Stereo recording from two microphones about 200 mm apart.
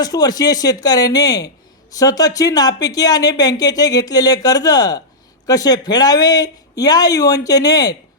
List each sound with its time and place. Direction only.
0.0 s speech: 20° left (ahead or behind)